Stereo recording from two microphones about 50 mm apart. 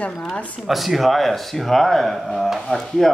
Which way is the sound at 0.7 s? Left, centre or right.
Centre.